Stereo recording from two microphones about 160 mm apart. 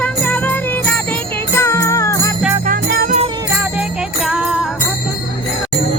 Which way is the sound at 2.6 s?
60° right (ahead or behind).